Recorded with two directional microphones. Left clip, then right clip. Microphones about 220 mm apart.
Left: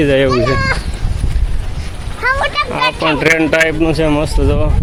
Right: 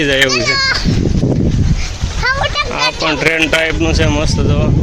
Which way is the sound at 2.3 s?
30° right (ahead or behind).